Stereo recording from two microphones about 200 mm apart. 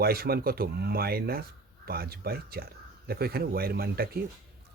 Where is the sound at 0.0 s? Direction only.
50° right (ahead or behind).